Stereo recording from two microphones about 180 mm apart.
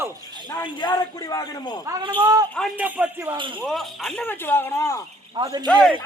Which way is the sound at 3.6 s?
Centre (ahead or behind).